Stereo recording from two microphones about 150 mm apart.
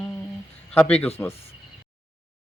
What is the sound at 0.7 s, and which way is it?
Music, 10° left (ahead or behind).